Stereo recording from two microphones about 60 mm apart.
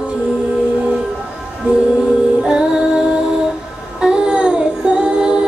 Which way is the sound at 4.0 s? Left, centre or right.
Centre.